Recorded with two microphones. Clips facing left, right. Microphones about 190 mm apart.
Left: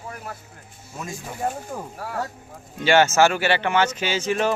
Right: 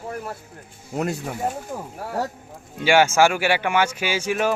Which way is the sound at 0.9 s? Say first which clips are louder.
Right 9 dB; 65° right (ahead or behind).